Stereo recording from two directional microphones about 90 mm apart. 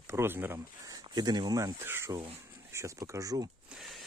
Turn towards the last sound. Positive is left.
turn(degrees=0)  # may be behind; listen again after turning